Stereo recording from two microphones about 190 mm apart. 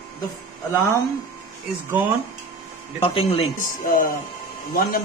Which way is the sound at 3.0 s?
30° left (ahead or behind).